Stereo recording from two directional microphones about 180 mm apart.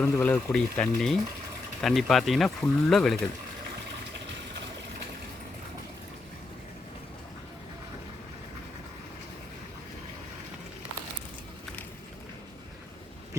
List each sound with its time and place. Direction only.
0.0 s speech: 5° left (ahead or behind)